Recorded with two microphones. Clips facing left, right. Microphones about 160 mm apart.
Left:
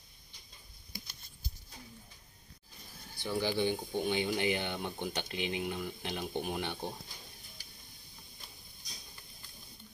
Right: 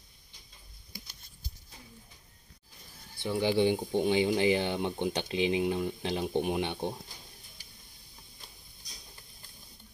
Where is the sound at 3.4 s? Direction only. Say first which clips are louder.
Right 6 dB; 20° right (ahead or behind).